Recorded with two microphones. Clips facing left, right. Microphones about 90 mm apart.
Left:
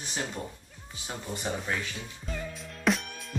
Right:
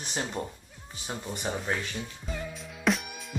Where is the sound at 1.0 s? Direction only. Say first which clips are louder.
Right 1 dB; 20° right (ahead or behind).